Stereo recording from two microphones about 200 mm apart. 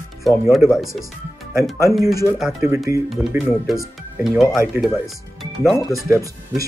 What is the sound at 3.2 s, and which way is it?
Speech, 5° right (ahead or behind).